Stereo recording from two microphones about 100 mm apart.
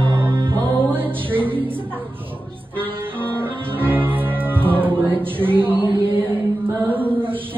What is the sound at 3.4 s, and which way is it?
Music, 20° right (ahead or behind).